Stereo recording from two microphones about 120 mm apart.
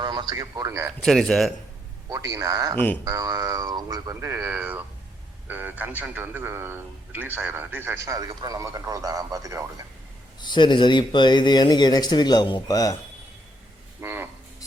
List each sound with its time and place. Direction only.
0.0 s a man's voice: 35° right (ahead or behind)
1.0 s speech: 5° left (ahead or behind)
2.0 s speech: 30° right (ahead or behind)
2.7 s speech: 15° left (ahead or behind)
3.0 s a man's voice: 30° right (ahead or behind)
10.4 s speech: 40° left (ahead or behind)
14.0 s a sound: 20° right (ahead or behind)